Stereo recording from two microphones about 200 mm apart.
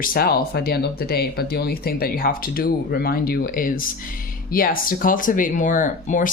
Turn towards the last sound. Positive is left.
turn(degrees=40)  # may be behind; listen again after turning